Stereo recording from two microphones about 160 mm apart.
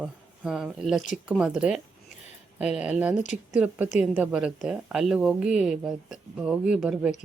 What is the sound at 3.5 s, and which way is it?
A woman's voice, 10° right (ahead or behind).